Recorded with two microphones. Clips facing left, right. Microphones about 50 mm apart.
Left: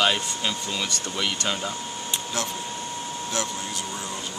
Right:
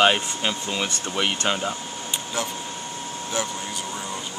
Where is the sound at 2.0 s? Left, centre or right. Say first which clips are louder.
Right 1 dB; centre.